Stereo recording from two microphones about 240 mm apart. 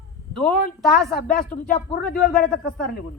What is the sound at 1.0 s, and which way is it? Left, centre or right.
Speech, centre.